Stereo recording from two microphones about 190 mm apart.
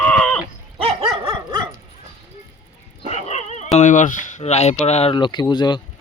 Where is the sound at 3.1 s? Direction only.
35° left (ahead or behind).